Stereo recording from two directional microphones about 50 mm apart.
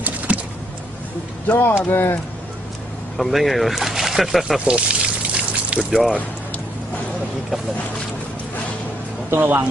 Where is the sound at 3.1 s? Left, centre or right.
Centre.